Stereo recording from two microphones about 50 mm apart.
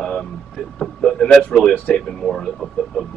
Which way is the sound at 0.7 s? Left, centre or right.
Centre.